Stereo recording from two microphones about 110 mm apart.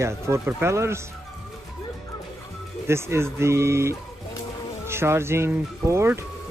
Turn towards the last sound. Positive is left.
turn(degrees=-25)  # may be behind; listen again after turning